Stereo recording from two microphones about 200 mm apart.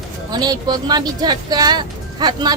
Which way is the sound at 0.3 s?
20° right (ahead or behind).